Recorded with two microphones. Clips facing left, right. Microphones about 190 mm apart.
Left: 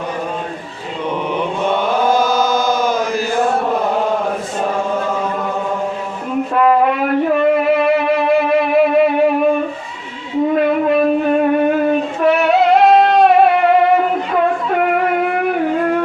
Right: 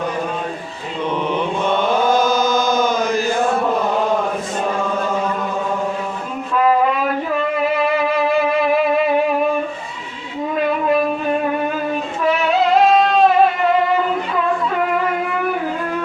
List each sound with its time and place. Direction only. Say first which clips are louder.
1.3 s chant: left 2 dB; 10° left (ahead or behind)
6.5 s music: left 2 dB; 55° left (ahead or behind)
10.5 s a sound: left 2 dB; 60° left (ahead or behind)
11.5 s music: left 7 dB; 60° left (ahead or behind)